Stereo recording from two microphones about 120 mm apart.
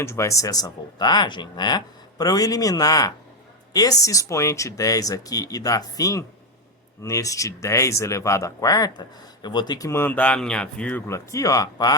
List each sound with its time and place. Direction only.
0.0 s speech: 25° left (ahead or behind)
11.1 s speech: 25° left (ahead or behind)